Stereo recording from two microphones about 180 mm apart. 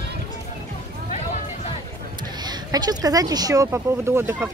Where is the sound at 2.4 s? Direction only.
20° right (ahead or behind).